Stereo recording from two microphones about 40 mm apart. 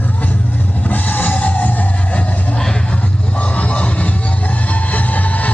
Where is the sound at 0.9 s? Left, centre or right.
Left.